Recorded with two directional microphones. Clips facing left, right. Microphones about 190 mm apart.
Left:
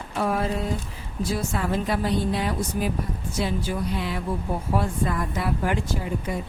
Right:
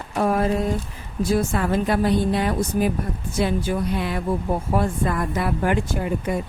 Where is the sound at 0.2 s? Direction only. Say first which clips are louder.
Right 4 dB; 45° right (ahead or behind).